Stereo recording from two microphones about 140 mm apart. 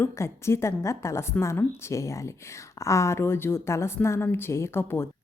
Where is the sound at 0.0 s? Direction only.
20° left (ahead or behind).